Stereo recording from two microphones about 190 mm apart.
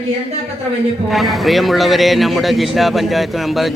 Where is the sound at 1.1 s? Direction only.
Centre (ahead or behind).